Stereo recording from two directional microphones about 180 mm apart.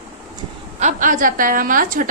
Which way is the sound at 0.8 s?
45° right (ahead or behind).